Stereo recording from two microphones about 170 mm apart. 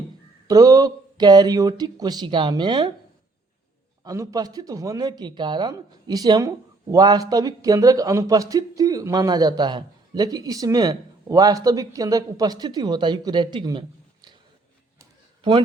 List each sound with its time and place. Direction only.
0.4 s speech: 20° right (ahead or behind)
4.0 s speech: 20° right (ahead or behind)